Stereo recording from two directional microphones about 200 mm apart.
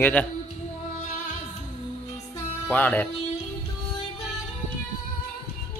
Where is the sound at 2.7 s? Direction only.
10° left (ahead or behind).